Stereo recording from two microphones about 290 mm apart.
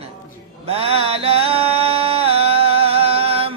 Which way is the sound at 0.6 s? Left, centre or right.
Centre.